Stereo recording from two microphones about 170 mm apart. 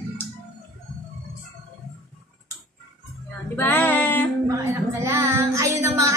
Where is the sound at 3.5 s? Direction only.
10° left (ahead or behind).